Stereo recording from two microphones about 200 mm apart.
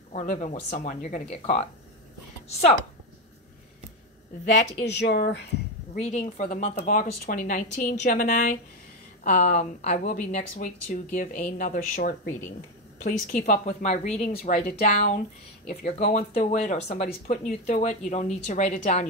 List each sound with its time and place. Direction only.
0.1 s a woman's voice: 35° left (ahead or behind)
4.8 s speech: 60° left (ahead or behind)
5.9 s a woman's voice: 35° left (ahead or behind)